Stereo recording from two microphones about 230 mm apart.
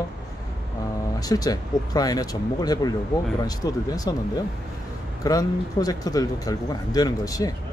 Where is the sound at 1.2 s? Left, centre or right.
Centre.